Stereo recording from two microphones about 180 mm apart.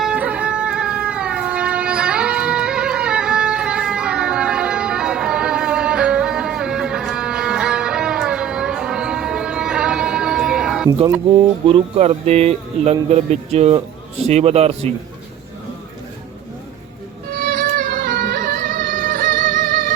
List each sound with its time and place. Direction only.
0.0 s music: 5° right (ahead or behind)
11.7 s speech: 35° right (ahead or behind)
17.3 s music: 55° right (ahead or behind)